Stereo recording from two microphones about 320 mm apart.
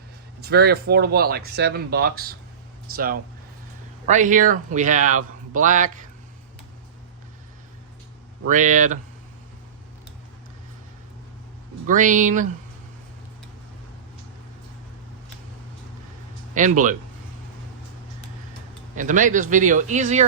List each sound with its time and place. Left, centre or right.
0.4 s speech: right
8.4 s speech: right
11.9 s speech: right
18.9 s speech: right